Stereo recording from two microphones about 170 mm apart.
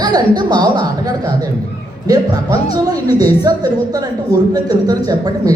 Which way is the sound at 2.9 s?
25° right (ahead or behind).